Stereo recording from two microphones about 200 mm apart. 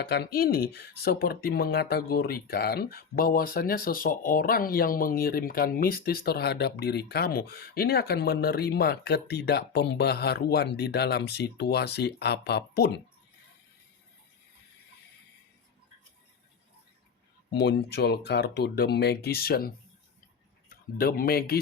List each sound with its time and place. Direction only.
0.0 s speech: 55° left (ahead or behind)
17.5 s speech: 55° left (ahead or behind)